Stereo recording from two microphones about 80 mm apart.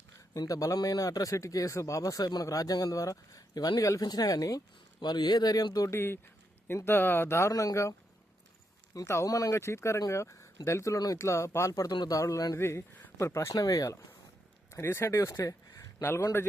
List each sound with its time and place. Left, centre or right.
0.3 s speech: left
4.9 s speech: left
5.9 s speech: left
9.0 s speech: left
11.9 s speech: left
12.5 s speech: left
14.7 s speech: left